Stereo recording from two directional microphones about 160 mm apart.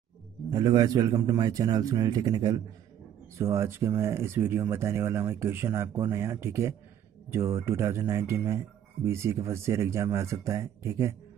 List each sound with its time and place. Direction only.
0.5 s a man's voice: 25° right (ahead or behind)